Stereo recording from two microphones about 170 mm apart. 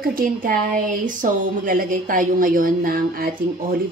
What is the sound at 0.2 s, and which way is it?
Speech, 55° right (ahead or behind).